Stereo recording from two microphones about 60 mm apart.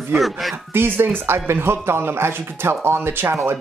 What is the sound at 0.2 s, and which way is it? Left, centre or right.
Speech, centre.